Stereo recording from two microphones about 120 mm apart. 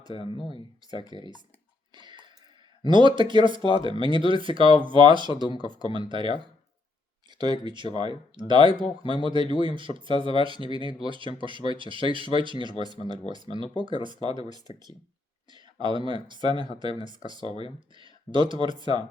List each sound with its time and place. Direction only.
0.1 s speech: 45° left (ahead or behind)
1.1 s speech: 40° right (ahead or behind)
1.9 s a sound: 40° right (ahead or behind)
2.9 s speech: 40° right (ahead or behind)